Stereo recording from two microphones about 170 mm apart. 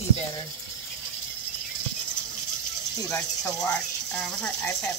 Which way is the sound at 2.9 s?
20° left (ahead or behind).